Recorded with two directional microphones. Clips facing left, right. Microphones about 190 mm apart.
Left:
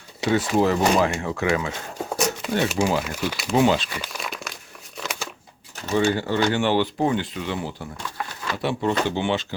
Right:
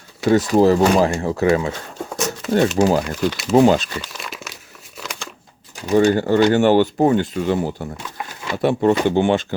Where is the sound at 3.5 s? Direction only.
40° right (ahead or behind).